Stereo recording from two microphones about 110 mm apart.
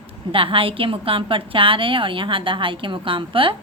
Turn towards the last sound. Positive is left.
turn(degrees=-50)  # may be behind; listen again after turning